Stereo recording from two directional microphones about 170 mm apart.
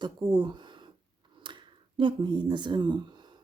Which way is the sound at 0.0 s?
30° right (ahead or behind).